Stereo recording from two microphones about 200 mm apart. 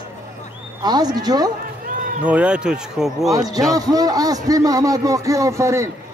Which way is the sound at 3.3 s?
20° right (ahead or behind).